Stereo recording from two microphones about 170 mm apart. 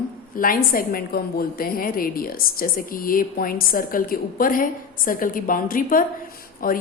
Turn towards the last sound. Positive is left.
turn(degrees=55)  # may be behind; listen again after turning